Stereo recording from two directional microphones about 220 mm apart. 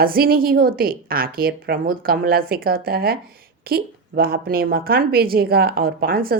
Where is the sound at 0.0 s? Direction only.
40° right (ahead or behind).